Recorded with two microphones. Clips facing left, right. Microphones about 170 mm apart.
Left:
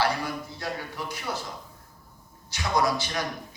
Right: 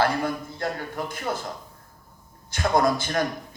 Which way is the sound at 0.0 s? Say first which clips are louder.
Right 4 dB; 50° right (ahead or behind).